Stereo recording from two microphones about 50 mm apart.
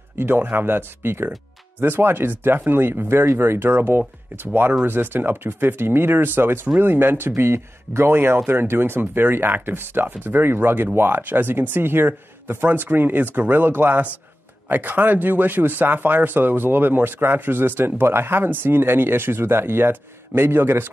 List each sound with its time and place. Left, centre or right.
0.2 s speech: right